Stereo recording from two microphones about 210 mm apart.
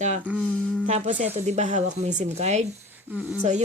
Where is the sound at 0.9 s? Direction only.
35° right (ahead or behind).